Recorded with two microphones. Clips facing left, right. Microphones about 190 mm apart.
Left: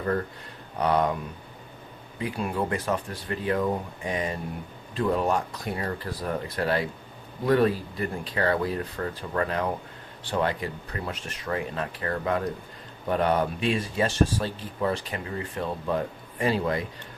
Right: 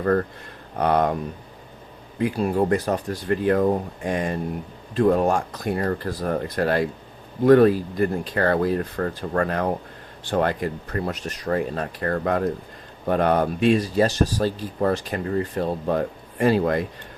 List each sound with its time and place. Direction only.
0.8 s speech: 55° right (ahead or behind)
2.3 s speech: 40° right (ahead or behind)